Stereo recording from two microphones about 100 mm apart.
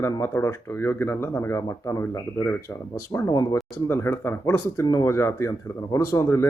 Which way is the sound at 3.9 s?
25° left (ahead or behind).